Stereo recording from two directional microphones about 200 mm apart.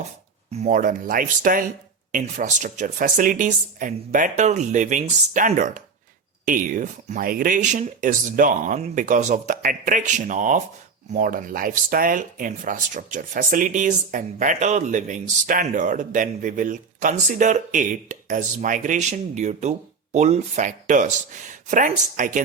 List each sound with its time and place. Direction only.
0.6 s speech: 40° right (ahead or behind)